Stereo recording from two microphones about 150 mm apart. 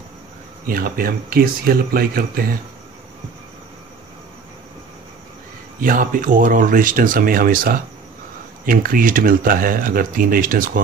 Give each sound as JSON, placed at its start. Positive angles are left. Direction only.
{"t": 0.7, "sound": "speech", "side_deg": -75}
{"t": 5.8, "sound": "speech", "side_deg": -65}